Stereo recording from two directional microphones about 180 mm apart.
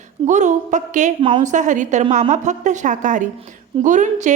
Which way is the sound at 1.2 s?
30° right (ahead or behind).